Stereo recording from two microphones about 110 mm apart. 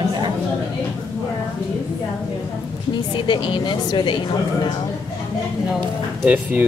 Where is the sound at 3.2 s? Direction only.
45° left (ahead or behind).